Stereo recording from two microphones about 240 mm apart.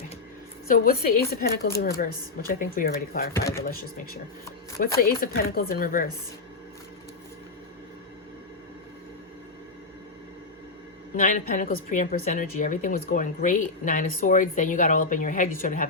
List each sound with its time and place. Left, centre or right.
0.7 s a woman's voice: left
3.3 s speech: centre
3.6 s a woman's voice: left
11.2 s a woman's voice: left